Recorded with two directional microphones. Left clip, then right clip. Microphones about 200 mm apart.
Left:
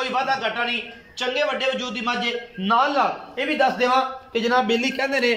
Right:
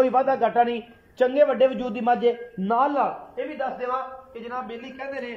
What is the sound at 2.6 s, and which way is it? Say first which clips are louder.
Speech: left 3 dB; 25° right (ahead or behind).